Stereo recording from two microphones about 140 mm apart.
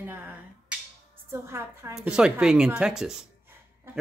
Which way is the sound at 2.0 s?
5° right (ahead or behind).